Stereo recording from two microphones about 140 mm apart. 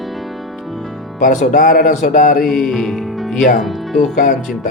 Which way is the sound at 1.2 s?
65° left (ahead or behind).